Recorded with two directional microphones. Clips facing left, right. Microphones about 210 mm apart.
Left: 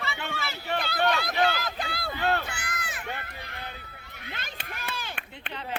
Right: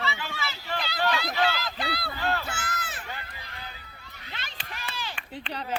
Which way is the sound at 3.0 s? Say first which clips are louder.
Left 3 dB; 60° left (ahead or behind).